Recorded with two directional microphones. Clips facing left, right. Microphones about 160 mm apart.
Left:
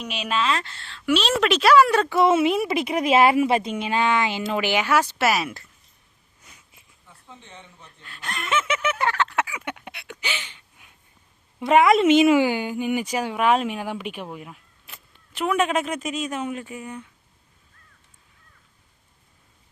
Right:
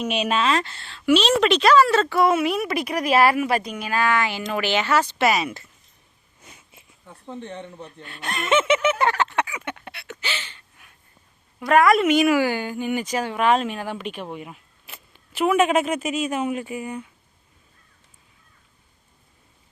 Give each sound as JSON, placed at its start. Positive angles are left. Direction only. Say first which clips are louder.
{"t": 0.5, "sound": "a woman's voice", "louder": "right 4 dB", "side_deg": -15}
{"t": 7.0, "sound": "speech", "louder": "right 12 dB", "side_deg": -55}
{"t": 8.4, "sound": "speech", "louder": "right 6 dB", "side_deg": -25}
{"t": 9.3, "sound": "a sound", "louder": "right 1 dB", "side_deg": 5}
{"t": 11.6, "sound": "speech", "louder": "left 1 dB", "side_deg": 20}
{"t": 14.3, "sound": "speech", "louder": "right 3 dB", "side_deg": -5}